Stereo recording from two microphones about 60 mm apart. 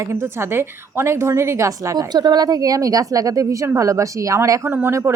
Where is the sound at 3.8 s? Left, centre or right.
Right.